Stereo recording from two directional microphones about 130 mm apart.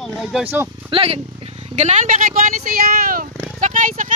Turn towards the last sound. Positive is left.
turn(degrees=-85)